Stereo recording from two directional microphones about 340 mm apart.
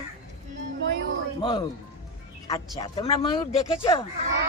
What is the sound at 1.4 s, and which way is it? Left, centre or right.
Speech, centre.